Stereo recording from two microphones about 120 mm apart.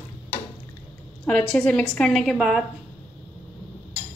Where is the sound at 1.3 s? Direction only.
10° left (ahead or behind).